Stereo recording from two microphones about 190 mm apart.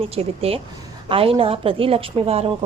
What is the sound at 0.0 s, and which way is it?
A woman's voice, 30° right (ahead or behind).